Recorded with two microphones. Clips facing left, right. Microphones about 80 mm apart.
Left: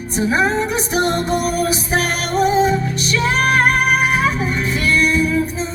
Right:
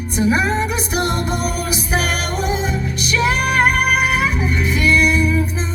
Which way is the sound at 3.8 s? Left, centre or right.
Left.